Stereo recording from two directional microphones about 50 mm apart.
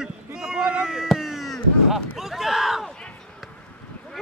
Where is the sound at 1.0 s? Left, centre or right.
Centre.